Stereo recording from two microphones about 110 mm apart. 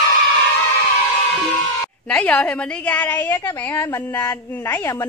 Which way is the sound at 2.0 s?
10° left (ahead or behind).